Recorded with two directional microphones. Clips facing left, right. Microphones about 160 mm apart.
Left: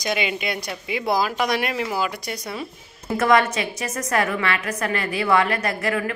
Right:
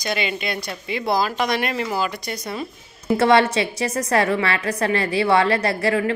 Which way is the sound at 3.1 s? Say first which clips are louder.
Right 3 dB; 30° right (ahead or behind).